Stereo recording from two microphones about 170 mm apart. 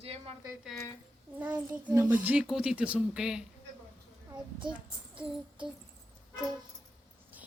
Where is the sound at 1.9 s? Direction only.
10° right (ahead or behind).